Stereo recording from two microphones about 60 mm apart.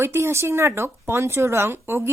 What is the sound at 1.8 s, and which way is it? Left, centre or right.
Speech, right.